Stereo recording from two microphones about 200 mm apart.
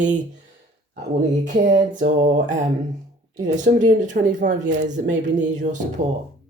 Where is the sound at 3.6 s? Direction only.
40° right (ahead or behind).